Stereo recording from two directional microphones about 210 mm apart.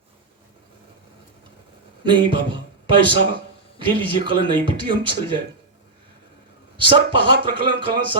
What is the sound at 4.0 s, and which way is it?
Speech, 25° right (ahead or behind).